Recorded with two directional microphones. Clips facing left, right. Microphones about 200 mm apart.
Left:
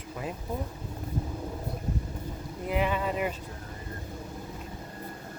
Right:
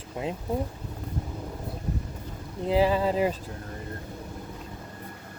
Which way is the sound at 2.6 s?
30° right (ahead or behind).